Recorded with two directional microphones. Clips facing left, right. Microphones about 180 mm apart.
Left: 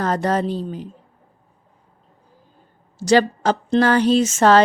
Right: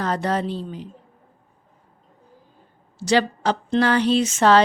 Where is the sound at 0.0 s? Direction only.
45° left (ahead or behind).